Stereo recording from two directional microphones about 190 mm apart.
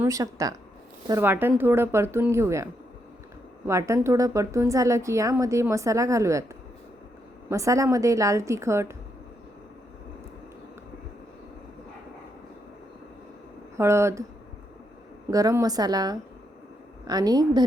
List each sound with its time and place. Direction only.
0.0 s speech: 15° right (ahead or behind)
3.7 s speech: 15° right (ahead or behind)
7.5 s speech: 15° right (ahead or behind)
13.7 s speech: 15° right (ahead or behind)
15.3 s a woman's voice: 20° right (ahead or behind)